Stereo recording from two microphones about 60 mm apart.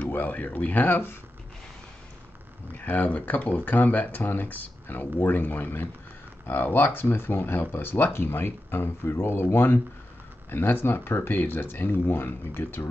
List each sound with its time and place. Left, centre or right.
0.1 s speech: left
2.7 s speech: left